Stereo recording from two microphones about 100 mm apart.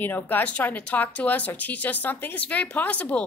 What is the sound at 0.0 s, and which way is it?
A woman's voice, 20° left (ahead or behind).